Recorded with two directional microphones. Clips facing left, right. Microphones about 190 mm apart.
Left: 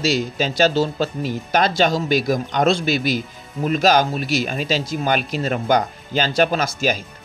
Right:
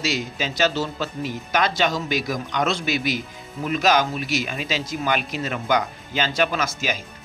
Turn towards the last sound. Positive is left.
turn(degrees=35)  # may be behind; listen again after turning